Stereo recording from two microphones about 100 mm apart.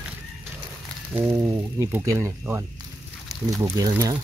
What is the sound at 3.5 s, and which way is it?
Speech, 35° right (ahead or behind).